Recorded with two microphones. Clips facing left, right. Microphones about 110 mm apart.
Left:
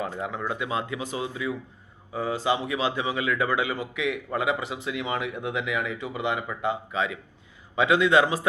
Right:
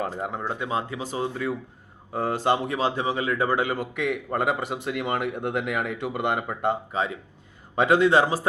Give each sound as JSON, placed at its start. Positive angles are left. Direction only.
{"t": 0.1, "sound": "a man's voice", "side_deg": -40}